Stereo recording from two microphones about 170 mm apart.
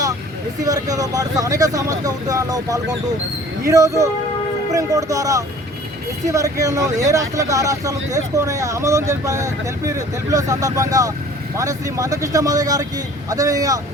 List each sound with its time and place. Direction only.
0.6 s speech: 20° right (ahead or behind)